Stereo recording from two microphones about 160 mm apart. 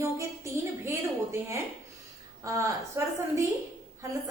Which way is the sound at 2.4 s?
20° right (ahead or behind).